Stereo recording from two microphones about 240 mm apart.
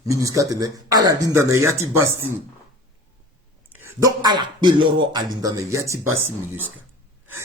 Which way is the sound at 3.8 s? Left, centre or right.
Centre.